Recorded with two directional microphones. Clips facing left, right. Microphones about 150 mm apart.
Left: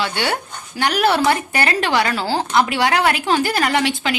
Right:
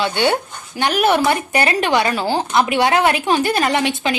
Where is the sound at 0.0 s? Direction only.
20° right (ahead or behind).